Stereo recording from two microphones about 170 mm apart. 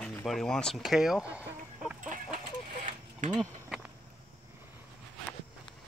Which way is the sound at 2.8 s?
45° right (ahead or behind).